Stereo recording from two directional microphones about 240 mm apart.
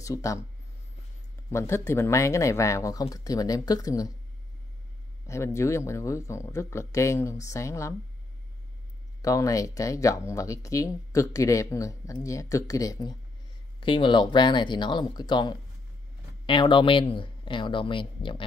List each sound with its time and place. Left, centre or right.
0.0 s speech: centre
1.5 s speech: centre
5.2 s speech: centre
9.2 s speech: centre